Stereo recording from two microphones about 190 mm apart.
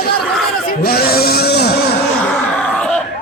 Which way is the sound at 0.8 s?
55° left (ahead or behind).